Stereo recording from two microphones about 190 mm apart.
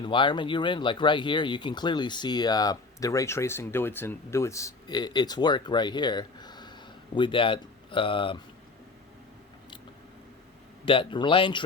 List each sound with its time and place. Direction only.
0.0 s speech: 25° left (ahead or behind)
10.8 s speech: 25° left (ahead or behind)